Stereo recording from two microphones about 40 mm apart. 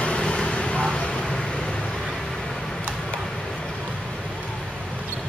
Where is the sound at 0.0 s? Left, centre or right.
Left.